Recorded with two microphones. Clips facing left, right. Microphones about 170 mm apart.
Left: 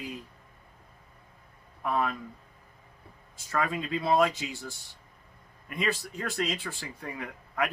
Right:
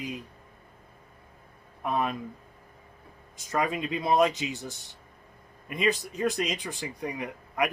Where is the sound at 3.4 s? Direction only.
20° right (ahead or behind).